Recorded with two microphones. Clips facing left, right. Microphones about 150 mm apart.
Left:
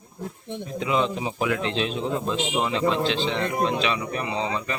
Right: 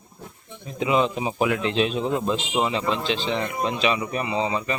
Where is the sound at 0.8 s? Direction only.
10° right (ahead or behind).